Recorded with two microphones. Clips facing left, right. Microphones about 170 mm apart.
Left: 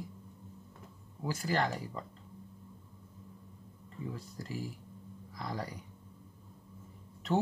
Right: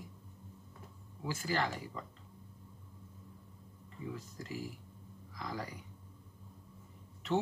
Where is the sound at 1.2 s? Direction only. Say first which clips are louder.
Left 3 dB; 40° left (ahead or behind).